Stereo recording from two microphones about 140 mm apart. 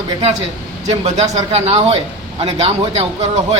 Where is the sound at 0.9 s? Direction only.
50° right (ahead or behind).